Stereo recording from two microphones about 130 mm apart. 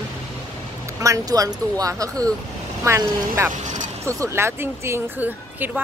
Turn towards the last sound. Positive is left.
turn(degrees=-15)  # may be behind; listen again after turning